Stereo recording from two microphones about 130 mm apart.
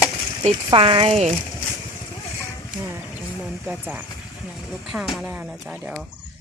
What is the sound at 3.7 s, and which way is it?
Speech, 15° right (ahead or behind).